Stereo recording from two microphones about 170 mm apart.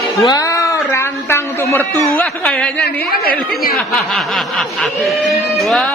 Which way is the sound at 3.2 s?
60° left (ahead or behind).